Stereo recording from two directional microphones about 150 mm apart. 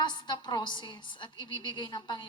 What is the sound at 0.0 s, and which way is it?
A woman's voice, 30° left (ahead or behind).